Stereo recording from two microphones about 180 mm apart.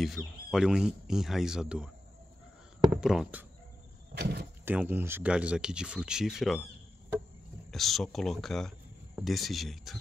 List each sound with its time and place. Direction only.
0.0 s speech: centre (ahead or behind)
2.9 s speech: 5° right (ahead or behind)
4.2 s speech: 65° right (ahead or behind)
4.6 s speech: 10° right (ahead or behind)
7.7 s speech: centre (ahead or behind)